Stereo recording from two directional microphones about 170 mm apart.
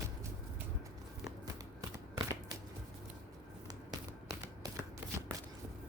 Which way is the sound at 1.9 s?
20° right (ahead or behind).